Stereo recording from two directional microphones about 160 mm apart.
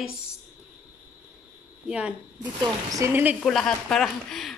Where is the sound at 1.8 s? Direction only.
5° right (ahead or behind).